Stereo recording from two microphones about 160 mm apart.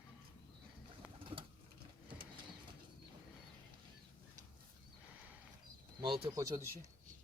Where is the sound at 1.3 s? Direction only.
30° right (ahead or behind).